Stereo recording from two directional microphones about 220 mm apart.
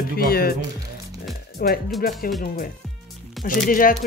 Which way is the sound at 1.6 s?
45° left (ahead or behind).